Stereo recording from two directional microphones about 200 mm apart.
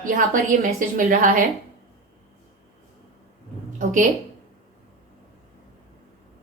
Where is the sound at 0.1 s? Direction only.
50° right (ahead or behind).